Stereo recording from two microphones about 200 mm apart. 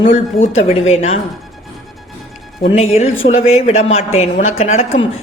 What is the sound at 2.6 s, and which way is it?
Speech, 30° left (ahead or behind).